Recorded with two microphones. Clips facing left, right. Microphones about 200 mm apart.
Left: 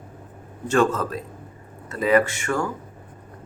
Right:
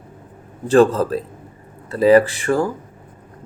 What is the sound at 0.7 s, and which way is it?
A man's voice, 35° right (ahead or behind).